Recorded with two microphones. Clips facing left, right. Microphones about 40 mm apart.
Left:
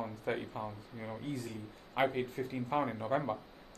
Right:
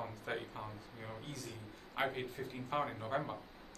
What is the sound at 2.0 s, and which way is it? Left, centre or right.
Speech, centre.